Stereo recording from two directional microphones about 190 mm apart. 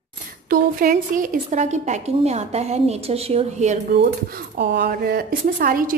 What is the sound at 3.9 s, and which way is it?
Speech, 60° right (ahead or behind).